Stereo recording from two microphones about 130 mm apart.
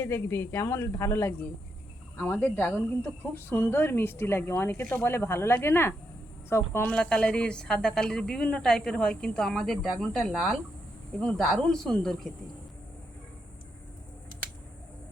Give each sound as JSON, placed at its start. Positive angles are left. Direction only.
{"t": 0.0, "sound": "a woman's voice", "side_deg": 20}
{"t": 6.9, "sound": "a woman's voice", "side_deg": 10}